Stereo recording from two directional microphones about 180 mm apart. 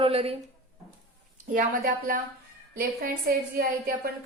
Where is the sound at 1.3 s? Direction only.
50° right (ahead or behind).